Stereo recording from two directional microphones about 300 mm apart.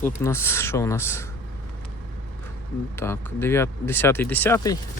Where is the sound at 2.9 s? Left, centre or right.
Centre.